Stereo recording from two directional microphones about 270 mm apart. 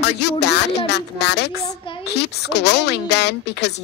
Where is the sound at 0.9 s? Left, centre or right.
Left.